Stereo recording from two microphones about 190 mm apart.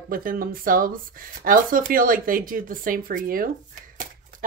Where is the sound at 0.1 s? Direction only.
50° right (ahead or behind).